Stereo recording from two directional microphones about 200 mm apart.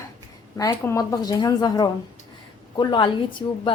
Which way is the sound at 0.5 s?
15° left (ahead or behind).